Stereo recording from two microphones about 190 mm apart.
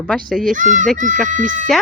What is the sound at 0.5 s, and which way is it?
Speech, 40° right (ahead or behind).